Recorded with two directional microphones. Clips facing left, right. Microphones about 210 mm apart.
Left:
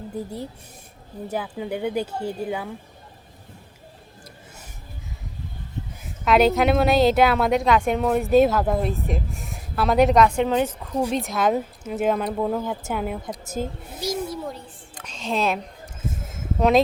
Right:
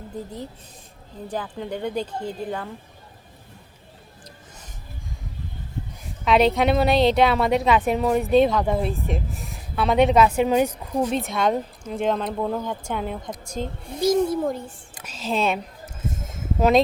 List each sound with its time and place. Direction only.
1.3 s speech: 5° left (ahead or behind)
6.2 s a woman's voice: centre (ahead or behind)
11.1 s a woman's voice: centre (ahead or behind)
14.0 s a child's voice: 50° right (ahead or behind)
14.9 s a woman's voice: 5° right (ahead or behind)